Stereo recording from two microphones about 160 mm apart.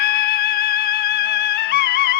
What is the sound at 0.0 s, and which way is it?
Music, 90° left.